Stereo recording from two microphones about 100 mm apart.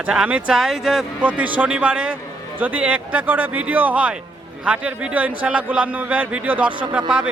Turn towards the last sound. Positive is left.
turn(degrees=-10)  # may be behind; listen again after turning